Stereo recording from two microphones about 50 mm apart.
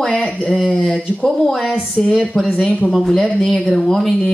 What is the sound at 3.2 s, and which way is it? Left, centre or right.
Speech, left.